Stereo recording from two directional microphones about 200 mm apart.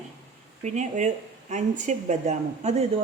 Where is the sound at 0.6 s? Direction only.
35° right (ahead or behind).